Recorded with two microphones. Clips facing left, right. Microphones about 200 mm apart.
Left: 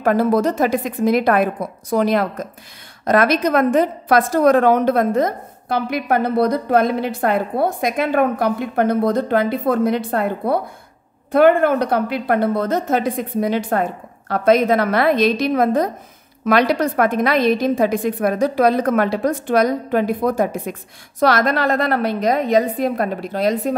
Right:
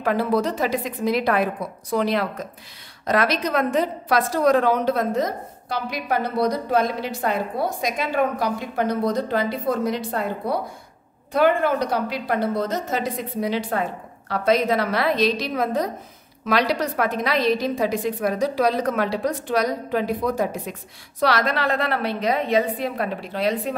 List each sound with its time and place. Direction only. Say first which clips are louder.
0.0 s a woman's voice: left 5 dB; 45° left (ahead or behind)